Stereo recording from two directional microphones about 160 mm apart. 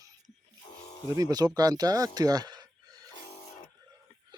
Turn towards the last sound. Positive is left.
turn(degrees=-25)  # may be behind; listen again after turning